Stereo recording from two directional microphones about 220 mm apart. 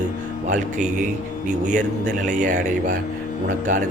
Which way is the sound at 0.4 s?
35° right (ahead or behind).